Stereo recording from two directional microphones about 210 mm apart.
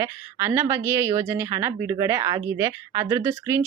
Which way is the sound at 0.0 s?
15° right (ahead or behind).